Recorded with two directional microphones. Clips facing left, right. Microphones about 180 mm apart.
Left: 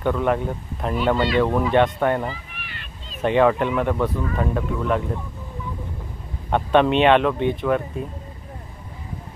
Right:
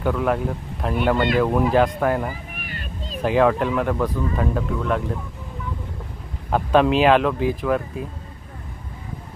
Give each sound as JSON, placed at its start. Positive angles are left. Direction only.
{"t": 0.0, "sound": "speech", "side_deg": 0}
{"t": 2.5, "sound": "vehicle", "side_deg": -45}
{"t": 3.2, "sound": "speech", "side_deg": 0}
{"t": 6.5, "sound": "speech", "side_deg": 0}